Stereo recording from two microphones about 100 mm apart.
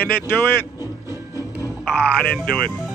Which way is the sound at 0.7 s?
25° right (ahead or behind).